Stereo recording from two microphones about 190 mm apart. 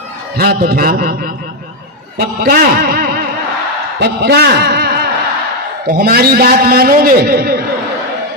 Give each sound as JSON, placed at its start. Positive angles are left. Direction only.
{"t": 0.3, "sound": "a man's voice", "side_deg": -55}